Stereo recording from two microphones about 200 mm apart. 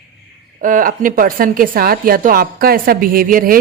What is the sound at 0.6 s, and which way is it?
A woman's voice, 40° right (ahead or behind).